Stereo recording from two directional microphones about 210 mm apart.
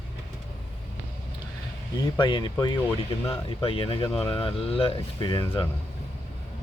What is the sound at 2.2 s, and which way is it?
Speech, 20° left (ahead or behind).